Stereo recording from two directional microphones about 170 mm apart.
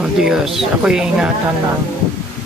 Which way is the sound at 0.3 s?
5° right (ahead or behind).